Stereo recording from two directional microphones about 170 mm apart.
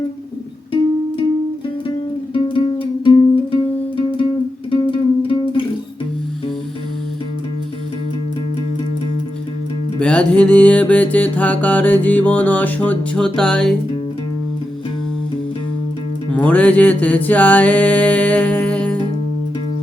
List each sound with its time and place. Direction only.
2.3 s music: 30° left (ahead or behind)
10.0 s music: 5° left (ahead or behind)
16.3 s music: 10° left (ahead or behind)